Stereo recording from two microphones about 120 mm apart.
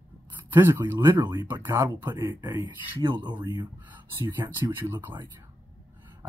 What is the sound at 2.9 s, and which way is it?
Speech, 40° right (ahead or behind).